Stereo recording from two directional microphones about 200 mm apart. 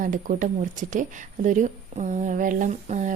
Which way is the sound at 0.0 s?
40° right (ahead or behind).